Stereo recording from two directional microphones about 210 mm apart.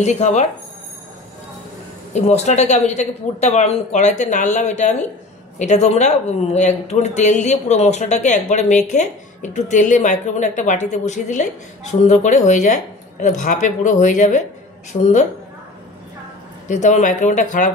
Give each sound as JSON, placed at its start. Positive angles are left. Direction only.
{"t": 0.0, "sound": "speech", "side_deg": 30}
{"t": 2.1, "sound": "speech", "side_deg": 30}
{"t": 16.6, "sound": "speech", "side_deg": 35}